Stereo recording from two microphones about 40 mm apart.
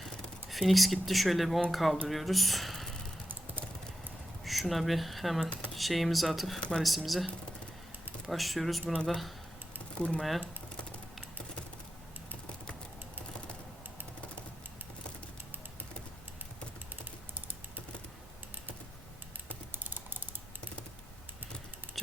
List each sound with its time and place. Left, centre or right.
0.0 s speech: centre
4.4 s speech: centre
6.6 s speech: centre
6.8 s speech: centre
8.3 s speech: centre
19.5 s typing: right